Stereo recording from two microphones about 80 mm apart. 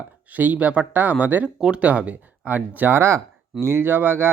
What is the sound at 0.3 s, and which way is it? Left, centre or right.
Speech, centre.